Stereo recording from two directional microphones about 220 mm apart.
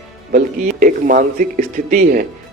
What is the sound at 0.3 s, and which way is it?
A man's voice, 35° right (ahead or behind).